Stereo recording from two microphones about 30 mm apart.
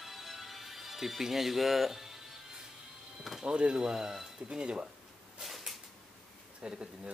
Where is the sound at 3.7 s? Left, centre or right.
Right.